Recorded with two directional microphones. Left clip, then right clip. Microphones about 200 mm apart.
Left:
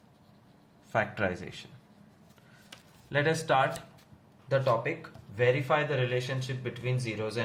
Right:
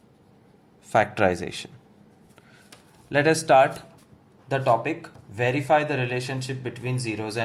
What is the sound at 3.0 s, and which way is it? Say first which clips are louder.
Speech: right 8 dB; 35° right (ahead or behind).